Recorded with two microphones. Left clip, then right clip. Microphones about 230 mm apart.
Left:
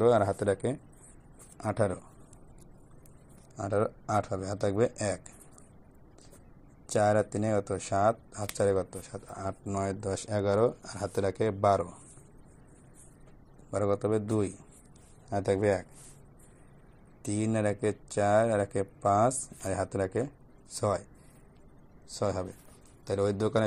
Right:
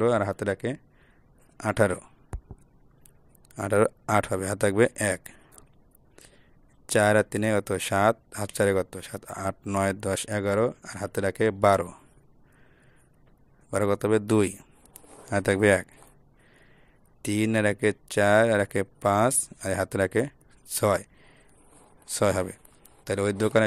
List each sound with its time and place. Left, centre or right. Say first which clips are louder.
0.0 s speech: even; right
3.6 s speech: right 7 dB; right
6.9 s speech: right 5 dB; right
9.5 s speech: right 7 dB; right
10.2 s speech: even; right
13.7 s speech: right 5 dB; right
17.2 s speech: right 6 dB; right
22.2 s speech: right 7 dB; right